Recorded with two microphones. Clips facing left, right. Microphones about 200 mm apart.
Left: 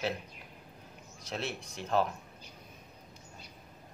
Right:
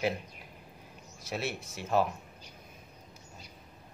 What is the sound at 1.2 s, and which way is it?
Speech, 5° right (ahead or behind).